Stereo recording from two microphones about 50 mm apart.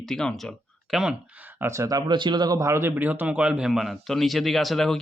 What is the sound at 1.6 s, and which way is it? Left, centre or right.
Speech, right.